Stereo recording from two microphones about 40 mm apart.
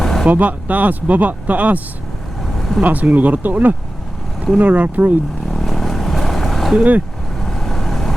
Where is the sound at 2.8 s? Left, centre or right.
Right.